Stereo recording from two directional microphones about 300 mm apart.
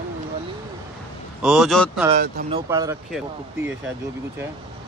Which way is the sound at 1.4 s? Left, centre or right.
Centre.